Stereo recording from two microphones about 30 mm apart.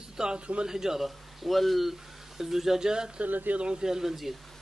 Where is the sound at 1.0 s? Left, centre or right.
Centre.